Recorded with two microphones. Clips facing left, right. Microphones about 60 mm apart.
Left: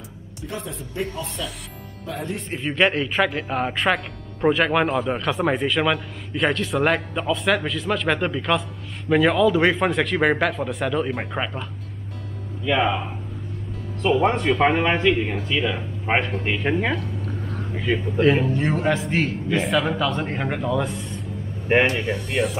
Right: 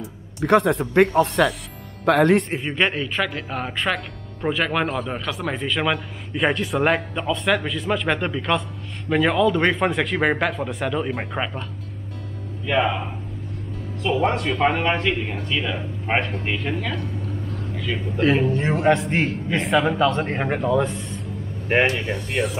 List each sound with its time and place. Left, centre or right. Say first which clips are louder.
0.4 s speech: right 15 dB; right
2.6 s speech: left 2 dB; centre
5.7 s speech: left 1 dB; centre
12.6 s speech: even; centre
14.1 s speech: left 2 dB; centre
16.6 s speech: left 4 dB; left
17.2 s vehicle: even; left
18.1 s a man's voice: right 1 dB; centre
20.8 s speech: right 2 dB; centre